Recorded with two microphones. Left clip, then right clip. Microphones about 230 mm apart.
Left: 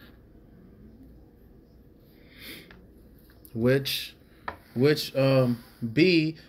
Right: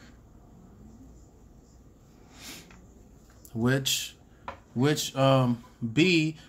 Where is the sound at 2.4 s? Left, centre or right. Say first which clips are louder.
Left 1 dB; centre.